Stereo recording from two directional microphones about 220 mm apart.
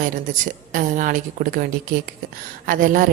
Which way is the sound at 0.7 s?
35° right (ahead or behind).